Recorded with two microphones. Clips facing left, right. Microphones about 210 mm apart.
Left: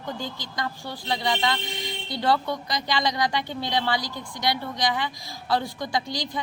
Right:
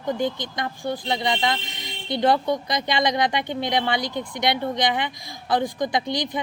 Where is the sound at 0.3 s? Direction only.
20° right (ahead or behind).